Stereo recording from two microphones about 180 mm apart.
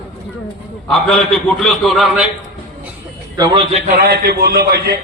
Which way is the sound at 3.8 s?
55° right (ahead or behind).